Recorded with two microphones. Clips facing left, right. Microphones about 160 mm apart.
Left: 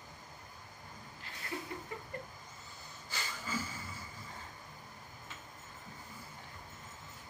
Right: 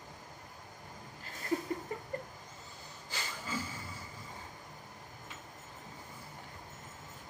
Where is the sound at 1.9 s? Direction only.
40° right (ahead or behind).